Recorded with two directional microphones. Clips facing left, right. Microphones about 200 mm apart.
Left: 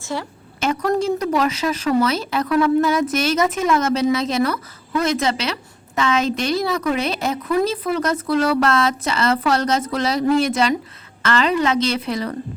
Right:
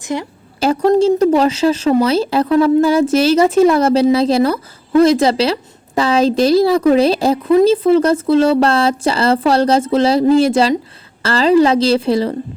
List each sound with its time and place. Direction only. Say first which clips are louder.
0.0 s a woman's voice: right 5 dB; 20° right (ahead or behind)
0.6 s a woman's voice: right 8 dB; 30° right (ahead or behind)